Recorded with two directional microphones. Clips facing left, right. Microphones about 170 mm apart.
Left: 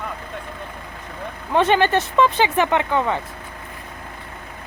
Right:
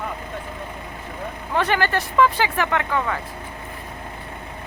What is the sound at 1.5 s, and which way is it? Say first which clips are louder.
Speech: left 5 dB; 20° left (ahead or behind).